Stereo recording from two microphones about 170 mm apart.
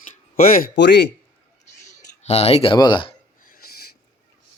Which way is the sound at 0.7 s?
90° left.